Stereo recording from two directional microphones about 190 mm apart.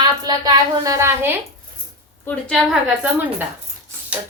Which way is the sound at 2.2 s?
5° left (ahead or behind).